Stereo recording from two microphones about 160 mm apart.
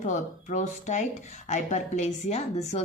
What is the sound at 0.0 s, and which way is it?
A woman's voice, 50° left (ahead or behind).